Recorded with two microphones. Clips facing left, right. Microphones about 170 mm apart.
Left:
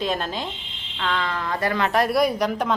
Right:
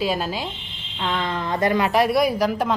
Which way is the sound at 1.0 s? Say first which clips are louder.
Right 1 dB; 20° right (ahead or behind).